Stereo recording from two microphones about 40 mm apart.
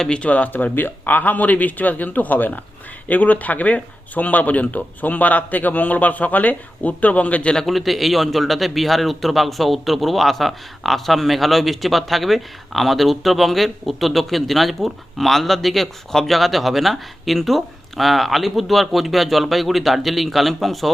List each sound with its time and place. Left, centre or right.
0.2 s speech: left
0.5 s a man's voice: left
7.7 s a man's voice: centre